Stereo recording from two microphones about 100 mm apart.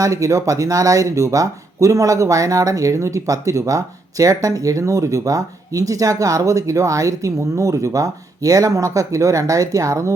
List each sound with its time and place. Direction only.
0.0 s speech: 35° right (ahead or behind)